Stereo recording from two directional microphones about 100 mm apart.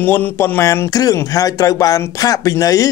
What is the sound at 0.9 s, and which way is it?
Speech, 35° left (ahead or behind).